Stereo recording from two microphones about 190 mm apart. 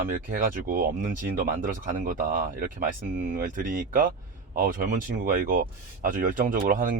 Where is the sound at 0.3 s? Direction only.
45° right (ahead or behind).